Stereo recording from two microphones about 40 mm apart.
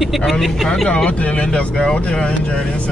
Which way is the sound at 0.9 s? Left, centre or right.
Left.